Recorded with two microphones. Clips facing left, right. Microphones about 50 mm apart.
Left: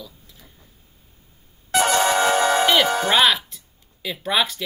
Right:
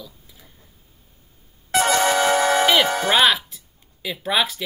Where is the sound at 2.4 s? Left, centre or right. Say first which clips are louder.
Even; right.